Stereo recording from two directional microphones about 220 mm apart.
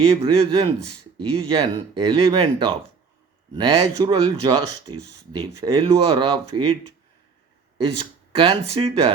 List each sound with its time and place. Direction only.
0.1 s speech: 25° right (ahead or behind)
7.9 s speech: 25° right (ahead or behind)